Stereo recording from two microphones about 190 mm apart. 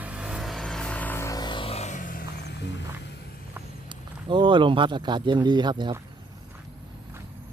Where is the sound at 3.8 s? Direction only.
25° right (ahead or behind).